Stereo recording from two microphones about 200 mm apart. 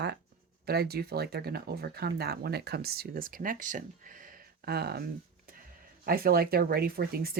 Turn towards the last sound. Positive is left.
turn(degrees=-50)  # may be behind; listen again after turning